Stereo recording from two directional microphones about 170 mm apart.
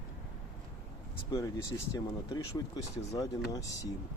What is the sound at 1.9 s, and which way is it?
Speech, 20° left (ahead or behind).